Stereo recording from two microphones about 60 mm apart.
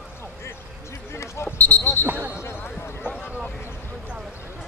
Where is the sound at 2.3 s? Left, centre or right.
Left.